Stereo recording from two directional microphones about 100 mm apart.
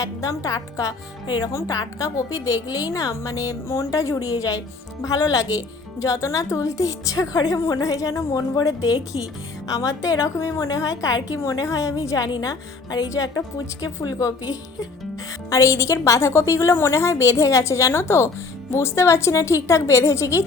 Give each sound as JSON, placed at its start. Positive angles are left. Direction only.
{"t": 0.0, "sound": "a woman's voice", "side_deg": 35}
{"t": 15.4, "sound": "a woman's voice", "side_deg": 30}